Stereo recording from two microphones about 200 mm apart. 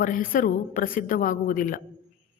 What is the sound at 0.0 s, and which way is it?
A man's voice, 45° left (ahead or behind).